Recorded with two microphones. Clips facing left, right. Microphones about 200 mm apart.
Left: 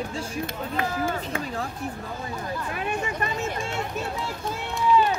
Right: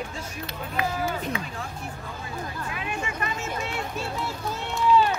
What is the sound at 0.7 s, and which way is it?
Speech, 50° left (ahead or behind).